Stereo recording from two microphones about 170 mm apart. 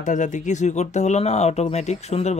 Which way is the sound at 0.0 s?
45° left (ahead or behind).